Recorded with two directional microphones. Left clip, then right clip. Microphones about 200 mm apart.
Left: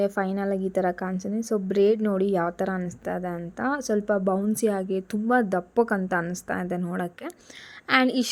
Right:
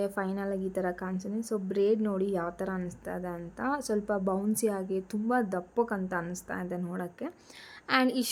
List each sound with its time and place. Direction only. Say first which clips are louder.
0.0 s a woman's voice: left 7 dB; 20° left (ahead or behind)